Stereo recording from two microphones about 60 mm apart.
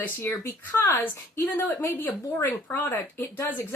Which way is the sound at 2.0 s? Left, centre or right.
Left.